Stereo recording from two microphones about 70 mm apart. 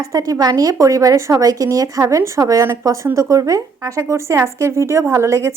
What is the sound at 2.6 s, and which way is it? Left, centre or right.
Speech, right.